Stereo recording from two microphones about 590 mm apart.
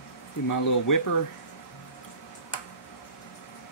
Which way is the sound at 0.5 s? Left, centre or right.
Left.